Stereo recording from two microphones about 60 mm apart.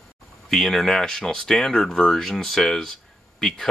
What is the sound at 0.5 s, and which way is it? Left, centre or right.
Speech, centre.